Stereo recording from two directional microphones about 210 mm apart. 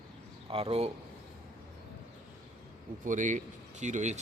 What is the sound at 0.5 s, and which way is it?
Speech, 30° right (ahead or behind).